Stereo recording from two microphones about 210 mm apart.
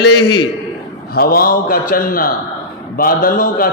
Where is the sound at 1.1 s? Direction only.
45° left (ahead or behind).